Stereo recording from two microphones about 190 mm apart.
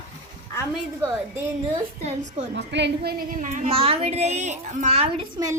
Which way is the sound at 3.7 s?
30° right (ahead or behind).